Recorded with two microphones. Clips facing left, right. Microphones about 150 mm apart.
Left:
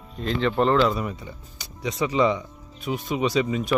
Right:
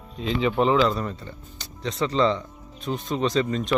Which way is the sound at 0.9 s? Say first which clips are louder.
Even; 10° left (ahead or behind).